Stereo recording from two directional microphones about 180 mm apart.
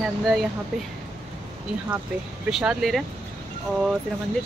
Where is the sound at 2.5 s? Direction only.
5° right (ahead or behind).